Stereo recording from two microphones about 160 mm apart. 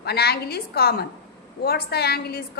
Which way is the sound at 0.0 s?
80° left.